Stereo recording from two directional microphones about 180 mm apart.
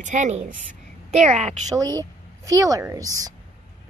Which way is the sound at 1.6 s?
20° right (ahead or behind).